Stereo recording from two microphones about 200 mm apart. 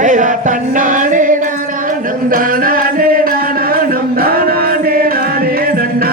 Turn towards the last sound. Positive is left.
turn(degrees=-50)  # may be behind; listen again after turning